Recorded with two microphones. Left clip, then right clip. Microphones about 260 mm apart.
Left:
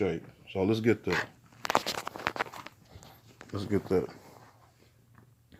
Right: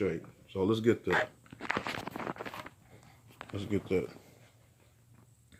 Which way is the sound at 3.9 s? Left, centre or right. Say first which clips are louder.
Left 3 dB; centre.